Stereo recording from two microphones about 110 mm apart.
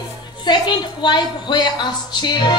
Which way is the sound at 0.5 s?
45° left (ahead or behind).